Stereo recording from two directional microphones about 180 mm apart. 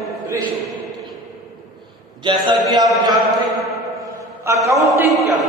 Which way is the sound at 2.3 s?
25° right (ahead or behind).